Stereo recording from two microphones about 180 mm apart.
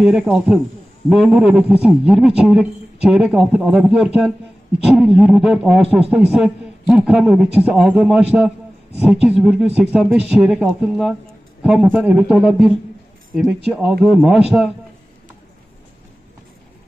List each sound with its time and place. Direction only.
0.0 s speech: 5° right (ahead or behind)